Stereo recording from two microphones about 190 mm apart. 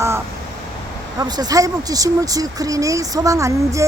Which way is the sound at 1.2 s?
20° right (ahead or behind).